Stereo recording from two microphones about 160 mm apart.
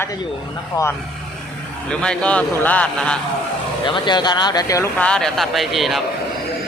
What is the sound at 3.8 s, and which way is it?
Speech, 30° left (ahead or behind).